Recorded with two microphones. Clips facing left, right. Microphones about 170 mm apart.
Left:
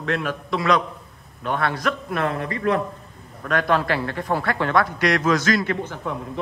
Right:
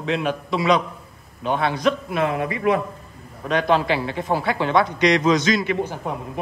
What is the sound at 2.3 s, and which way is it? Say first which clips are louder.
Speech: right 2 dB; 15° right (ahead or behind).